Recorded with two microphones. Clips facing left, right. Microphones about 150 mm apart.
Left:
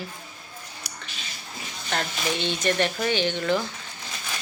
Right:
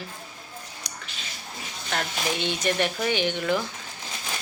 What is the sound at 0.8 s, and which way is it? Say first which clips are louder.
Drip: right 1 dB; 5° left (ahead or behind).